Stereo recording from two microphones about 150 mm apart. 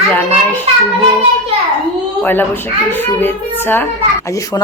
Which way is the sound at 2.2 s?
15° left (ahead or behind).